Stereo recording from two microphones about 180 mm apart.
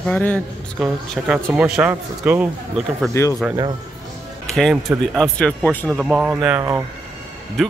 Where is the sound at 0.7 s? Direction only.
5° right (ahead or behind).